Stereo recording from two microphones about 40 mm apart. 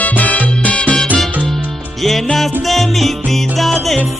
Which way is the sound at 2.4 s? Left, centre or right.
Centre.